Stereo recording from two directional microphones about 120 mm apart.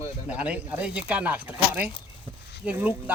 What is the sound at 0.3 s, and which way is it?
Speech, 10° right (ahead or behind).